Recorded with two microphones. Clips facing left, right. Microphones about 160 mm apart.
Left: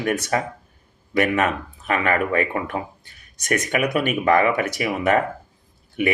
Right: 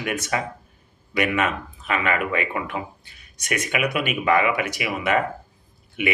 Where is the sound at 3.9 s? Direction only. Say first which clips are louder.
Left 3 dB; 35° left (ahead or behind).